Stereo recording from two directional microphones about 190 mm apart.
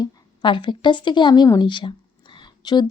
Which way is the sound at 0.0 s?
25° left (ahead or behind).